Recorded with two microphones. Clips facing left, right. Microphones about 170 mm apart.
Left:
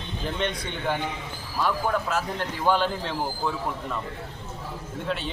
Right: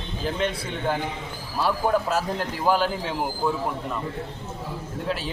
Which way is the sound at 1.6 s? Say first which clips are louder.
Right 3 dB; 35° right (ahead or behind).